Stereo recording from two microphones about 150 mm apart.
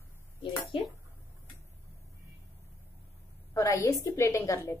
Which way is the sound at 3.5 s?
20° left (ahead or behind).